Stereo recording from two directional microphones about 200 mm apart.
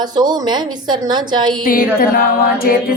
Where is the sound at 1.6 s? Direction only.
45° left (ahead or behind).